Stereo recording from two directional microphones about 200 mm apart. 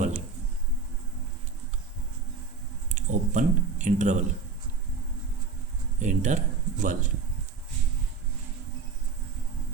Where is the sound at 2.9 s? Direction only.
40° right (ahead or behind).